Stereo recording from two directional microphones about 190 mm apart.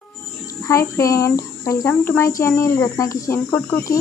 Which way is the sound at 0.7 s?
15° left (ahead or behind).